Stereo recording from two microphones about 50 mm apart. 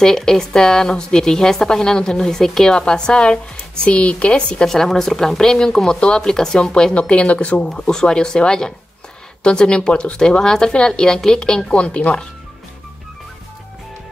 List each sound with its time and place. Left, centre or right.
0.0 s a woman's voice: centre
4.6 s a woman's voice: centre; by 7.7 s left
7.7 s a woman's voice: centre